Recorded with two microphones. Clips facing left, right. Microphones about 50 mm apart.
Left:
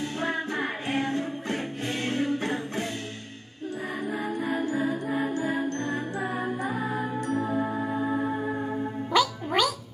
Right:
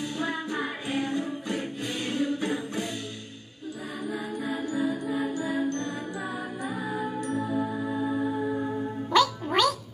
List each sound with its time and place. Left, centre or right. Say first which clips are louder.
0.2 s music: left 2 dB; left
4.4 s music: left 1 dB; left
9.1 s music: right 1 dB; centre